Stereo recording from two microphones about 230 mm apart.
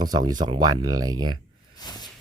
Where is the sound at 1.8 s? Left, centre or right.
Centre.